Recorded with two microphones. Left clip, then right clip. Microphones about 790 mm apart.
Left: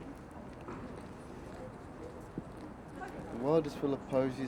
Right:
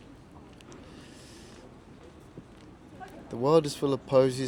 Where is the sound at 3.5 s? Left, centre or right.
Right.